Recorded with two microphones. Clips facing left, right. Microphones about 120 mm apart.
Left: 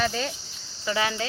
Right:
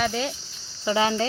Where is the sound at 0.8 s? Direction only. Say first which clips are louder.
Right 5 dB; 25° right (ahead or behind).